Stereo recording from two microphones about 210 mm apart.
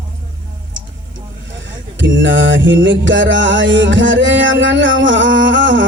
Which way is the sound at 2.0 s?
60° right (ahead or behind).